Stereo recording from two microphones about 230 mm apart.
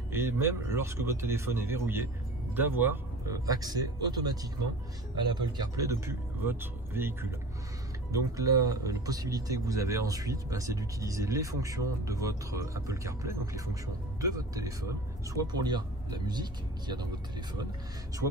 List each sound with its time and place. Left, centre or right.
0.1 s speech: centre